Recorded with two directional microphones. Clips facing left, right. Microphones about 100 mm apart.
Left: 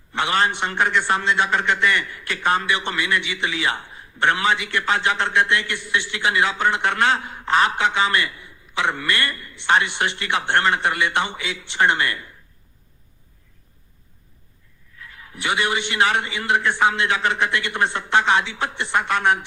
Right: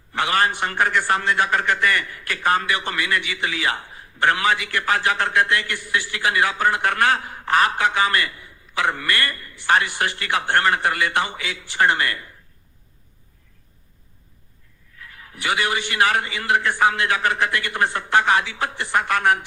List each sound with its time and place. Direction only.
0.1 s a man's voice: 20° left (ahead or behind)
15.0 s a man's voice: 25° left (ahead or behind)